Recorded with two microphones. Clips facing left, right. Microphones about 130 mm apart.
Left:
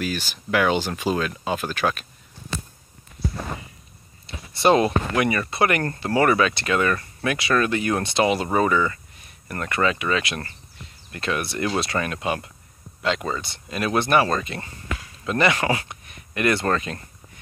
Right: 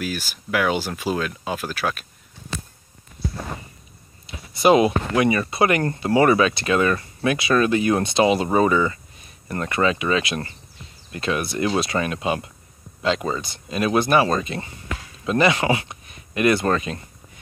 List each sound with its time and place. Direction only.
0.0 s speech: 10° right (ahead or behind)
4.6 s speech: 10° right (ahead or behind)